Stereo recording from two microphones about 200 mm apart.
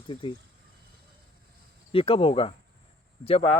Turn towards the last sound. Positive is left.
turn(degrees=30)  # may be behind; listen again after turning